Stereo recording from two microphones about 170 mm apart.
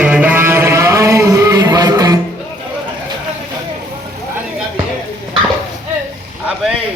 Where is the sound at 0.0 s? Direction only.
10° right (ahead or behind).